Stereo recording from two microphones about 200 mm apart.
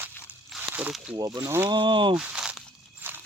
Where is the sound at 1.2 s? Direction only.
20° right (ahead or behind).